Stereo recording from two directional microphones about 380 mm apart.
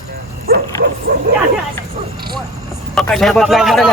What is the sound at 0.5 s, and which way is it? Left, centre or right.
Dog, right.